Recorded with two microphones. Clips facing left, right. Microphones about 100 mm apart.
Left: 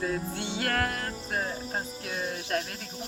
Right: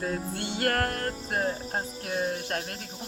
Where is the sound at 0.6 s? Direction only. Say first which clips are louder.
Right 3 dB; 45° right (ahead or behind).